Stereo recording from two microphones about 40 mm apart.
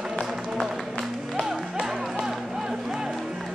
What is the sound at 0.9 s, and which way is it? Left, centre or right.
Music, centre.